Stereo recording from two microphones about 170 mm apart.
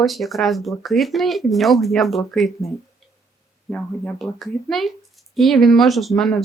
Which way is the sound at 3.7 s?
5° left (ahead or behind).